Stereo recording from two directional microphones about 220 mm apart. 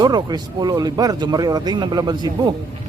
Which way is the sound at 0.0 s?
20° right (ahead or behind).